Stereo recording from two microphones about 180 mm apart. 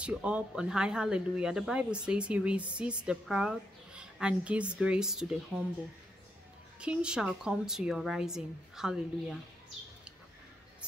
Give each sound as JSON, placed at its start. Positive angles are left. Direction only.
{"t": 0.0, "sound": "speech", "side_deg": -5}
{"t": 6.8, "sound": "speech", "side_deg": -5}